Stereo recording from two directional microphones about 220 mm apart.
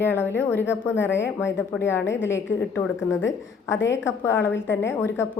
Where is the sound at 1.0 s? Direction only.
55° left (ahead or behind).